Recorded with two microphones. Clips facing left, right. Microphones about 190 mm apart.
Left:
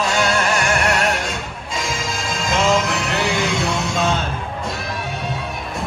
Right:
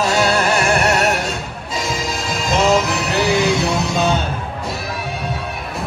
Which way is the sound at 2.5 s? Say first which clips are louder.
Right 3 dB; 40° right (ahead or behind).